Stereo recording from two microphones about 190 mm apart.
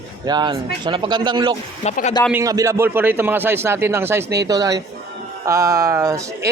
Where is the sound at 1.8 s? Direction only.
35° left (ahead or behind).